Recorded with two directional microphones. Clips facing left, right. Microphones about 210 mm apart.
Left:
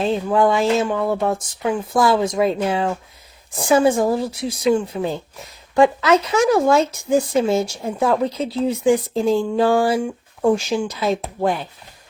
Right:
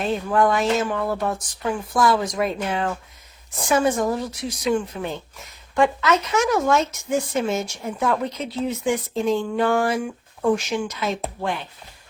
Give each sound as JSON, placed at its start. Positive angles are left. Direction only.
{"t": 0.0, "sound": "speech", "side_deg": 25}